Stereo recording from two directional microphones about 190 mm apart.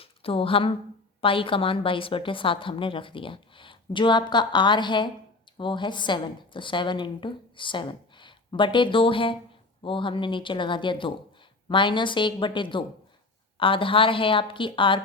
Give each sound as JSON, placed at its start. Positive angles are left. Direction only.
{"t": 0.0, "sound": "a woman's voice", "side_deg": 30}